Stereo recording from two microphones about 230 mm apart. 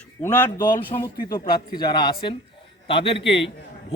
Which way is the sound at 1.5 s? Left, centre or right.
Left.